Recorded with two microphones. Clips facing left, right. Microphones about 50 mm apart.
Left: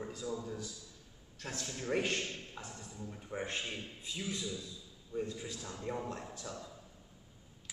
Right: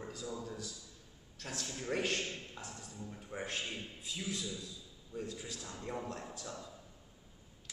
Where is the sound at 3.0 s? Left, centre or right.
Centre.